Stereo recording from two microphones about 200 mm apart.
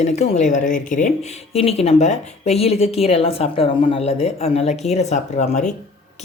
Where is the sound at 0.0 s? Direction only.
35° left (ahead or behind).